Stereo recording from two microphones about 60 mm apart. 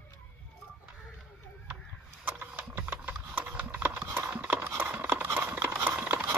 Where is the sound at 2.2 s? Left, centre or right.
Right.